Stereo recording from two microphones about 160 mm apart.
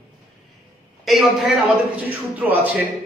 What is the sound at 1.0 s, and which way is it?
A man's voice, centre (ahead or behind).